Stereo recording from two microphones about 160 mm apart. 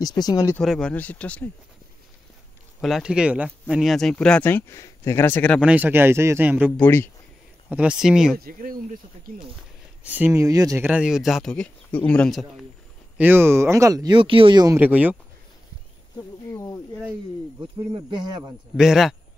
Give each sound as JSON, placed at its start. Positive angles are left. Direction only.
{"t": 0.0, "sound": "speech", "side_deg": 25}
{"t": 0.6, "sound": "speech", "side_deg": 5}
{"t": 2.8, "sound": "a man's voice", "side_deg": -5}
{"t": 5.6, "sound": "a man's voice", "side_deg": -10}
{"t": 6.8, "sound": "speech", "side_deg": 15}
{"t": 7.7, "sound": "a man's voice", "side_deg": -5}
{"t": 8.4, "sound": "speech", "side_deg": -65}
{"t": 10.0, "sound": "speech", "side_deg": -10}
{"t": 10.9, "sound": "a man's voice", "side_deg": -5}
{"t": 13.2, "sound": "speech", "side_deg": -15}
{"t": 14.8, "sound": "a man's voice", "side_deg": -10}
{"t": 16.2, "sound": "cricket", "side_deg": 20}
{"t": 17.9, "sound": "speech", "side_deg": -25}
{"t": 18.8, "sound": "a man's voice", "side_deg": 0}